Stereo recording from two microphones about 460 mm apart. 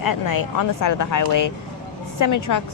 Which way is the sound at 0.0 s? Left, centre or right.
Left.